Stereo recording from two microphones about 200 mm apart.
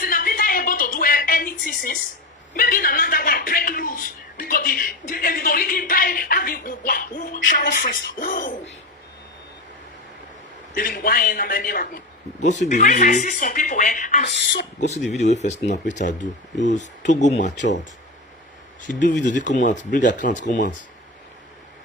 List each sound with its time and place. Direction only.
0.0 s a sound: 45° left (ahead or behind)
2.6 s speech: 45° left (ahead or behind)
10.8 s speech: 45° left (ahead or behind)
18.9 s speech: 40° left (ahead or behind)